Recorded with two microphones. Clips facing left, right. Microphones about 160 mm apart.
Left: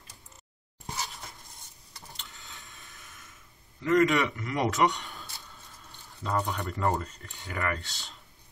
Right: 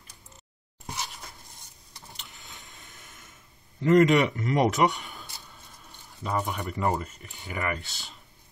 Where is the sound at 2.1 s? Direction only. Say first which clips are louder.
Even; 15° right (ahead or behind).